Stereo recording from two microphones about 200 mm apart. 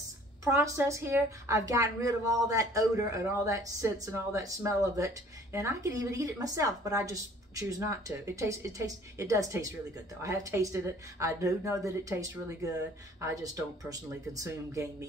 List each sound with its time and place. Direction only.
0.5 s a woman's voice: 15° right (ahead or behind)